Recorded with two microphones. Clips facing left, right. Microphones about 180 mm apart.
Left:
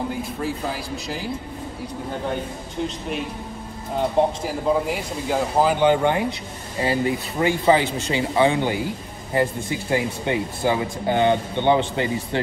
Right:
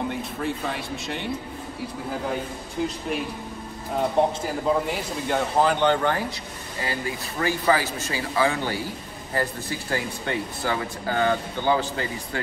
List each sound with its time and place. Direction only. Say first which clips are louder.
0.1 s a man's voice: left 2 dB; centre (ahead or behind)
3.9 s a man's voice: left 2 dB; centre (ahead or behind)
6.8 s speech: left 8 dB; 25° left (ahead or behind)